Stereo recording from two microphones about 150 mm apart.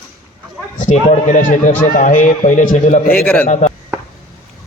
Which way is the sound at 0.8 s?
55° left (ahead or behind).